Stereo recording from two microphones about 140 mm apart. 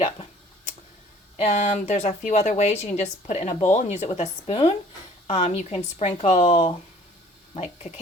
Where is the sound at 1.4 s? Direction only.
55° left (ahead or behind).